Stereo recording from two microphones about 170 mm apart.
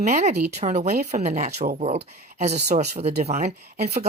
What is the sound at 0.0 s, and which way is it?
Speech, 40° right (ahead or behind).